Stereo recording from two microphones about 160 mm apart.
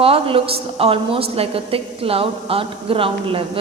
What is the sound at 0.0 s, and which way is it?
A woman's voice, 35° right (ahead or behind).